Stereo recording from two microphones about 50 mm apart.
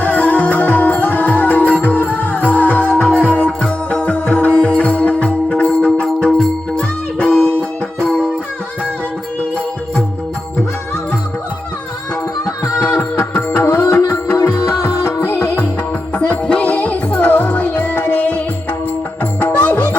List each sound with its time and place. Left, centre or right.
0.0 s music: left
5.5 s music: centre
12.8 s music: left
13.1 s music: left
13.8 s music: left
16.4 s music: left